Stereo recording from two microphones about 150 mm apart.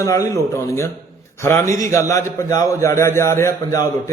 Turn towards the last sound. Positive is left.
turn(degrees=20)  # may be behind; listen again after turning